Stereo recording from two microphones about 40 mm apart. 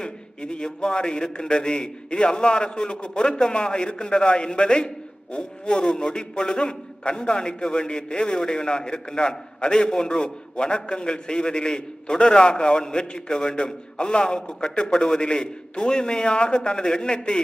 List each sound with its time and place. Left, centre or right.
0.0 s a man's voice: left